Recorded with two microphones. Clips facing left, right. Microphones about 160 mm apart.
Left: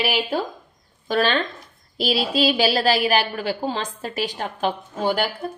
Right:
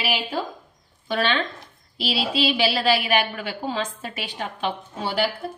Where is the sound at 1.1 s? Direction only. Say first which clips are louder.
Left 3 dB; 45° left (ahead or behind).